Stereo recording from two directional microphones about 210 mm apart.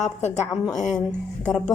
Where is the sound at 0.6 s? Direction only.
Centre (ahead or behind).